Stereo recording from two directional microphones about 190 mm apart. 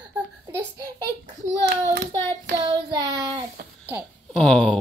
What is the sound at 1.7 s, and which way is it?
Child singing, 65° right (ahead or behind).